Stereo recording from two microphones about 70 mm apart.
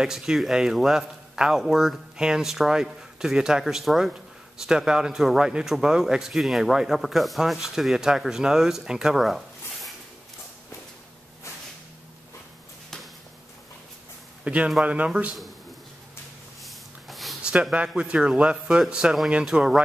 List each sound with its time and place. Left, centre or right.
0.0 s a man's voice: centre
14.4 s a man's voice: centre
16.6 s snort: centre
17.4 s a man's voice: centre